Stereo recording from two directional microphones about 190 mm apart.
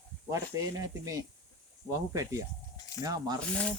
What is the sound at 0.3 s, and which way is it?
Speech, 15° right (ahead or behind).